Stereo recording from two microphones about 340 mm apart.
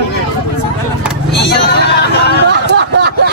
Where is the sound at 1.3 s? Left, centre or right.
Left.